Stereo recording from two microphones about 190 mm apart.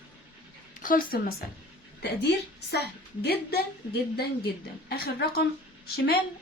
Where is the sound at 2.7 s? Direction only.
60° left (ahead or behind).